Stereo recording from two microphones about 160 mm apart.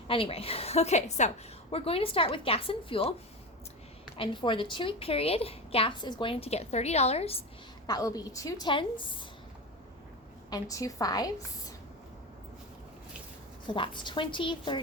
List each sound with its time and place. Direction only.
0.1 s a woman's voice: 35° left (ahead or behind)
4.2 s a woman's voice: 30° left (ahead or behind)
7.9 s a woman's voice: 25° left (ahead or behind)
10.5 s a woman's voice: 20° left (ahead or behind)
13.7 s a woman's voice: 30° left (ahead or behind)